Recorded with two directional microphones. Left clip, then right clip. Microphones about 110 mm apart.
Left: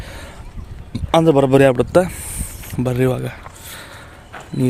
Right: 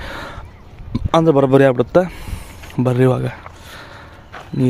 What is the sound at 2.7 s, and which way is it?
Speech, 35° right (ahead or behind).